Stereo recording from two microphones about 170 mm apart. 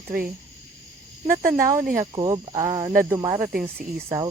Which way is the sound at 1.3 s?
55° right (ahead or behind).